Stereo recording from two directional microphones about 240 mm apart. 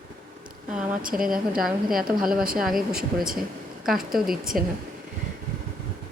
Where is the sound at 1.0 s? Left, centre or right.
Right.